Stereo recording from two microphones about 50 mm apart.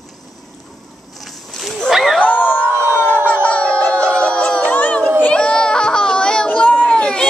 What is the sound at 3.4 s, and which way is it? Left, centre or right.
Music, left.